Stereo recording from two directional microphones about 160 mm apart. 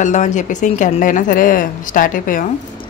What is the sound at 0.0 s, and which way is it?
A woman's voice, 50° left (ahead or behind).